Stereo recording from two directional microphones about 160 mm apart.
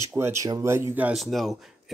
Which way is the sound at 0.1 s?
15° right (ahead or behind).